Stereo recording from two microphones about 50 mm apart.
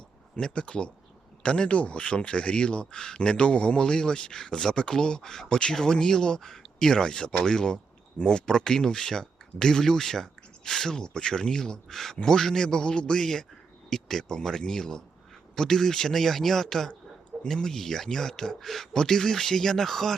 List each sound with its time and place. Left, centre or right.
0.3 s speech: left